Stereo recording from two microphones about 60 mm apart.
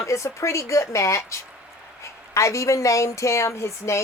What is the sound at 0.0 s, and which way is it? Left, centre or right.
A woman's voice, left.